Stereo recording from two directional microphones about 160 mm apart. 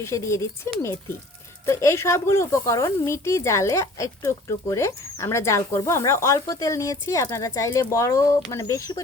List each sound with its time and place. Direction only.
0.0 s speech: 20° left (ahead or behind)
1.6 s speech: 20° left (ahead or behind)